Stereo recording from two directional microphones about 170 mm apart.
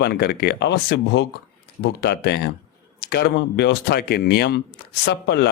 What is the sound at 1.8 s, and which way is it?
A man's voice, 70° left (ahead or behind).